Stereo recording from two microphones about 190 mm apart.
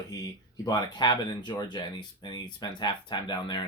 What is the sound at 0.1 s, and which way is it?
Speech, 20° left (ahead or behind).